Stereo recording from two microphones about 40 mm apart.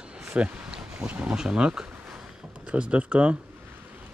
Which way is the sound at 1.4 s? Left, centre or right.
Right.